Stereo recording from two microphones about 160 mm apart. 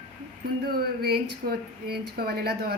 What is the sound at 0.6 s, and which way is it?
A woman's voice, 75° right (ahead or behind).